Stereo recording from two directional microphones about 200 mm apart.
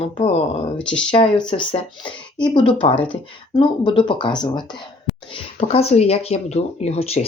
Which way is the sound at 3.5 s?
25° left (ahead or behind).